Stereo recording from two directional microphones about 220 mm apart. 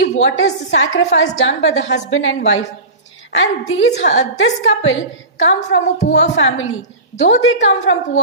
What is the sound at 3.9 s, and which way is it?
A woman's voice, 60° left (ahead or behind).